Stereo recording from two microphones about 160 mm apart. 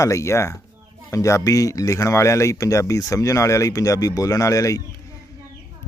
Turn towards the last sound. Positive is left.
turn(degrees=20)  # may be behind; listen again after turning